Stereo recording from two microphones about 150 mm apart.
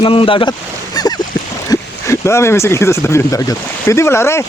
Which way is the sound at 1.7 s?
20° left (ahead or behind).